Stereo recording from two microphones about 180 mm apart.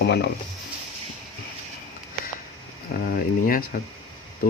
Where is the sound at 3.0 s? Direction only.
50° left (ahead or behind).